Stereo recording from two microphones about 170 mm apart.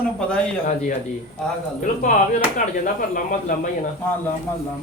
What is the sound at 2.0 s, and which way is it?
A man's voice, 50° left (ahead or behind).